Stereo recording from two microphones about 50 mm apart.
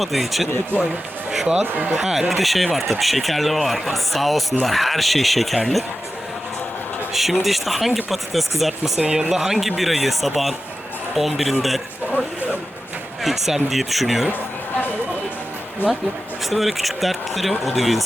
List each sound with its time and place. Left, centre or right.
0.0 s speech: centre
1.3 s speech: centre
1.6 s speech: right
2.0 s speech: centre
2.3 s speech: centre
7.1 s speech: centre
8.8 s speech: centre
12.1 s a sound: left
13.2 s speech: centre
15.8 s speech: left
16.5 s speech: centre